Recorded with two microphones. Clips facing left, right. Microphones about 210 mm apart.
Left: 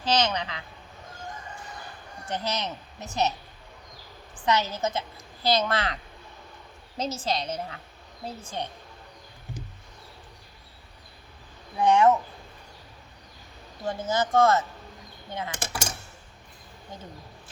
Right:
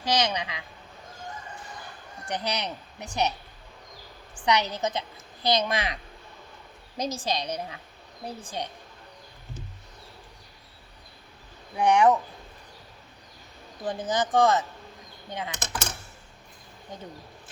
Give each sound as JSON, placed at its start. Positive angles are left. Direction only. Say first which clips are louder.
{"t": 0.0, "sound": "a woman's voice", "louder": "left 1 dB", "side_deg": -15}
{"t": 2.2, "sound": "a woman's voice", "louder": "even", "side_deg": -15}
{"t": 4.4, "sound": "a woman's voice", "louder": "even", "side_deg": -15}
{"t": 11.8, "sound": "a woman's voice", "louder": "even", "side_deg": -15}
{"t": 13.8, "sound": "a woman's voice", "louder": "even", "side_deg": -15}
{"t": 15.5, "sound": "speech", "louder": "left 1 dB", "side_deg": 10}